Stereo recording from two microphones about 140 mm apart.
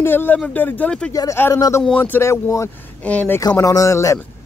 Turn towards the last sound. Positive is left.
turn(degrees=20)  # may be behind; listen again after turning